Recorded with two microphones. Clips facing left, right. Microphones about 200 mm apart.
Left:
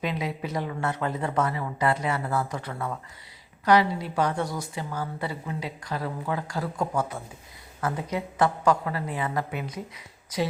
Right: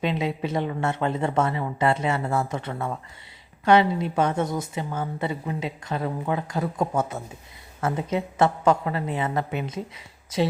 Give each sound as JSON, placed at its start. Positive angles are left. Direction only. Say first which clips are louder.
{"t": 0.0, "sound": "a woman's voice", "louder": "right 4 dB", "side_deg": -25}